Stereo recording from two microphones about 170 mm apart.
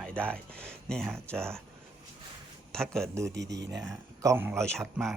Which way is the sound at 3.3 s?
90° right.